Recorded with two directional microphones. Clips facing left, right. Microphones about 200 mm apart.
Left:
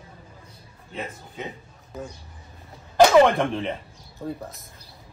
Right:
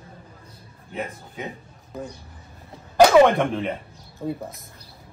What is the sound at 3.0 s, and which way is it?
Speech, 5° right (ahead or behind).